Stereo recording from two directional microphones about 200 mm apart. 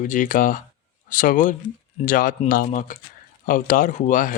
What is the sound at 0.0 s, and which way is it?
Speech, 40° left (ahead or behind).